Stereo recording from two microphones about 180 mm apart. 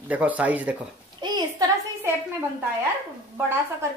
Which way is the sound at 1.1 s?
25° right (ahead or behind).